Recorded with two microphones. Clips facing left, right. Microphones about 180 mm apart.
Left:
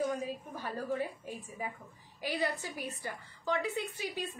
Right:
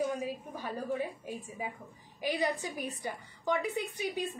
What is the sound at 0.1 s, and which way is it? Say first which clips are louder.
A woman's voice: right 1 dB; 15° right (ahead or behind).